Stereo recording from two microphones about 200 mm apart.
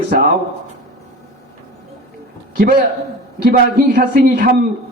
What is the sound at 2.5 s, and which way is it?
A man's voice, 45° right (ahead or behind).